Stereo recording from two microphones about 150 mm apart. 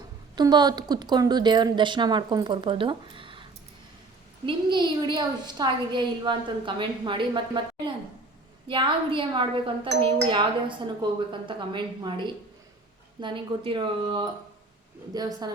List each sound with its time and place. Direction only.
0.3 s a woman's voice: 30° right (ahead or behind)
4.4 s a woman's voice: 30° right (ahead or behind)